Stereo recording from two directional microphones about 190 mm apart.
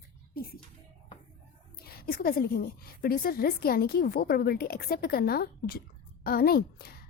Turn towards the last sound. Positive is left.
turn(degrees=55)  # may be behind; listen again after turning